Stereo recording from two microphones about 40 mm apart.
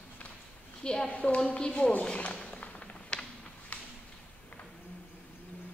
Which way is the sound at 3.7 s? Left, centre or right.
Left.